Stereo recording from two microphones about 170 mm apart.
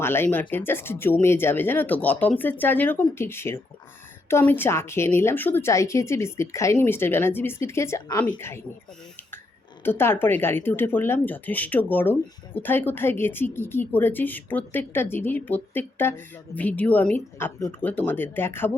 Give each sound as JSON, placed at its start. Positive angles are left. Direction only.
{"t": 0.0, "sound": "speech", "side_deg": 15}
{"t": 9.8, "sound": "speech", "side_deg": 15}